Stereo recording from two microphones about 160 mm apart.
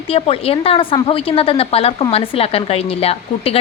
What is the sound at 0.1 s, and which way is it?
A woman's voice, 35° left (ahead or behind).